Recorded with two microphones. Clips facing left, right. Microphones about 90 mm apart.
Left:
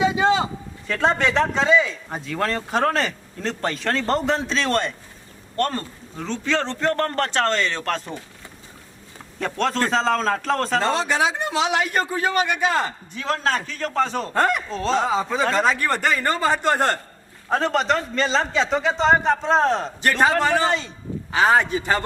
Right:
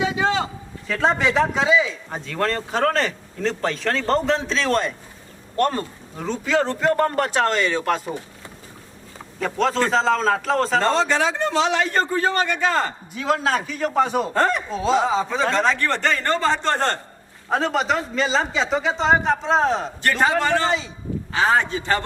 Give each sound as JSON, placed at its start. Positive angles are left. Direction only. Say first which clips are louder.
{"t": 0.0, "sound": "a sound", "louder": "left 3 dB", "side_deg": 10}
{"t": 0.9, "sound": "a man's voice", "louder": "even", "side_deg": 0}
{"t": 9.4, "sound": "a man's voice", "louder": "right 2 dB", "side_deg": 0}
{"t": 13.1, "sound": "a man's voice", "louder": "right 2 dB", "side_deg": -5}
{"t": 17.5, "sound": "a man's voice", "louder": "even", "side_deg": -5}
{"t": 20.4, "sound": "a man's voice", "louder": "left 1 dB", "side_deg": 15}
{"t": 20.7, "sound": "a man's voice", "louder": "even", "side_deg": 0}
{"t": 21.3, "sound": "a man's voice", "louder": "left 2 dB", "side_deg": 15}